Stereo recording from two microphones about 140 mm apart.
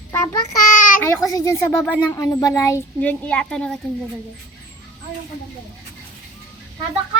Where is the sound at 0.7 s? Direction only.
70° left (ahead or behind).